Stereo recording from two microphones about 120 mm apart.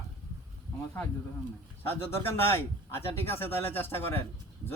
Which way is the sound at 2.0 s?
20° left (ahead or behind).